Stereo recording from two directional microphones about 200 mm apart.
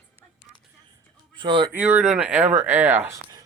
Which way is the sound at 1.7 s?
5° right (ahead or behind).